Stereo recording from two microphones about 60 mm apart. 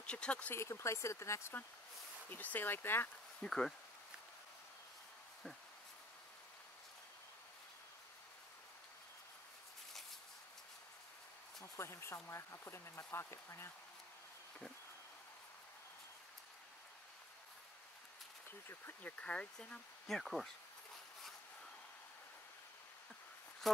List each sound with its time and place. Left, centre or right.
0.0 s speech: centre
0.6 s speech: left
2.2 s speech: left
3.3 s speech: centre
11.6 s speech: left
19.0 s speech: left
20.1 s speech: centre